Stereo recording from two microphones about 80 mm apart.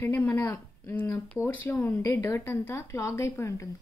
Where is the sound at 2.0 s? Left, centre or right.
Left.